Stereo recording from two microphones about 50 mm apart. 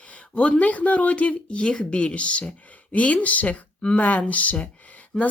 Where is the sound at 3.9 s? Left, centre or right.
Left.